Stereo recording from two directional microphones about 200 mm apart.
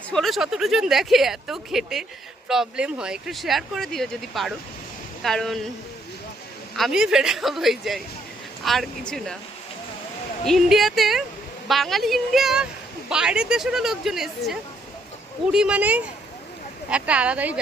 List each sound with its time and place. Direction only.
0.1 s speech: centre (ahead or behind)
6.7 s speech: centre (ahead or behind)
10.4 s a woman's voice: centre (ahead or behind)